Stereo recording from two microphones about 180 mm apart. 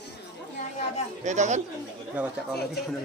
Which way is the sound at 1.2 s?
40° right (ahead or behind).